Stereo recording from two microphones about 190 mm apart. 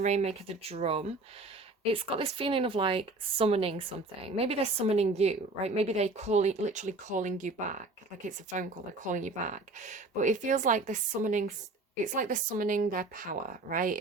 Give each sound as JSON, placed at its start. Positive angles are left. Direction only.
{"t": 0.0, "sound": "speech", "side_deg": -35}